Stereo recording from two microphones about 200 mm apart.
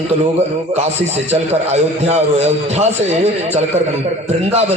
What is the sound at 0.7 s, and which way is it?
A man's voice, 30° right (ahead or behind).